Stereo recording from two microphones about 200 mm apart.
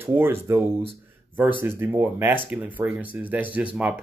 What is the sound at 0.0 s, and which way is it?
Speech, 10° right (ahead or behind).